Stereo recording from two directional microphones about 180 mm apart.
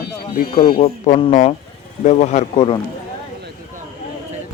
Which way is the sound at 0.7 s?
40° left (ahead or behind).